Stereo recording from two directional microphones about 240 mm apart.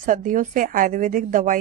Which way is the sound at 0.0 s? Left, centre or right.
Right.